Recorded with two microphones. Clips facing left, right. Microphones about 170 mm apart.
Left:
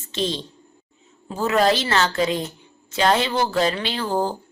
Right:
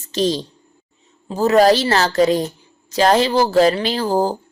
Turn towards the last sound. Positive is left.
turn(degrees=-40)  # may be behind; listen again after turning